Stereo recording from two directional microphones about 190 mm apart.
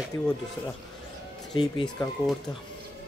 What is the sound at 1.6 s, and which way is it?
Speech, centre (ahead or behind).